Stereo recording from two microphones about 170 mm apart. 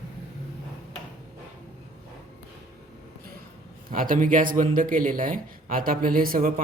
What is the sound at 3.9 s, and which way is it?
Speech, 55° right (ahead or behind).